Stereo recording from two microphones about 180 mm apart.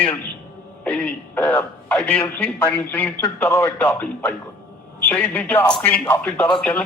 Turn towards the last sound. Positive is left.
turn(degrees=5)  # may be behind; listen again after turning